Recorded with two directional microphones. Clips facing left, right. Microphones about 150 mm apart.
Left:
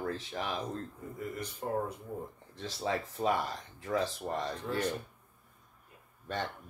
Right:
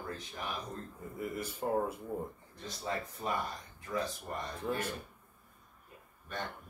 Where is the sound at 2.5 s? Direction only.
90° left.